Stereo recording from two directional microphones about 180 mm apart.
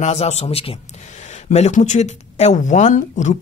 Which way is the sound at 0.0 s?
35° left (ahead or behind).